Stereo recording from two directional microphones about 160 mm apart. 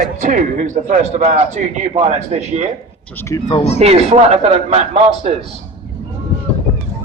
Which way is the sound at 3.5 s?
40° left (ahead or behind).